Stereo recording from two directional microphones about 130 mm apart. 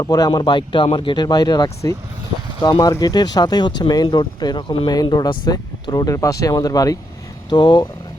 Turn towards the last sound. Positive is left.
turn(degrees=35)  # may be behind; listen again after turning